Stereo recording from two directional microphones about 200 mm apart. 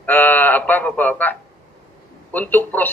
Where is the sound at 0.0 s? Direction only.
10° left (ahead or behind).